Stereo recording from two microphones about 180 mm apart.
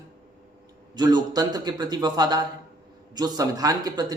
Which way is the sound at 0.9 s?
25° right (ahead or behind).